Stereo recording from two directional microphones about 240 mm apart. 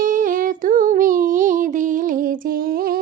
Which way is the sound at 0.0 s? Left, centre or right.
Right.